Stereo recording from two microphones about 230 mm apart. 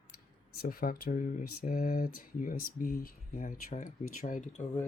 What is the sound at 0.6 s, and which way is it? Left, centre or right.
Speech, left.